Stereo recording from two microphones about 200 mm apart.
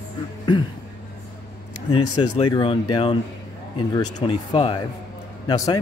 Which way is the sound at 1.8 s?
30° left (ahead or behind).